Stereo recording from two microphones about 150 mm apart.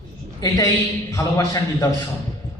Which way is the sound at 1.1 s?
20° left (ahead or behind).